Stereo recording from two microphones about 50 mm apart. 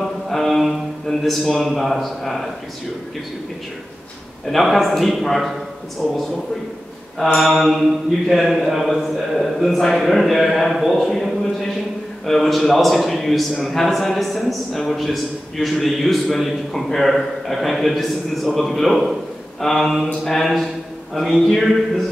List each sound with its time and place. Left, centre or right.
0.3 s music: centre
1.0 s a man's voice: centre
4.5 s a man's voice: centre
7.3 s a man's voice: centre